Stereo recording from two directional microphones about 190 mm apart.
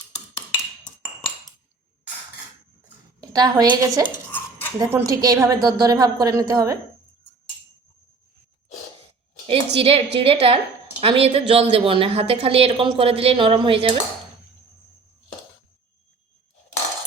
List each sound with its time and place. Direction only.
3.2 s a woman's voice: 20° right (ahead or behind)
4.3 s cutlery: 10° left (ahead or behind)
4.8 s a woman's voice: 15° right (ahead or behind)
9.5 s a woman's voice: 30° right (ahead or behind)